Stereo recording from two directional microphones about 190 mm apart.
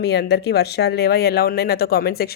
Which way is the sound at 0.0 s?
60° left (ahead or behind).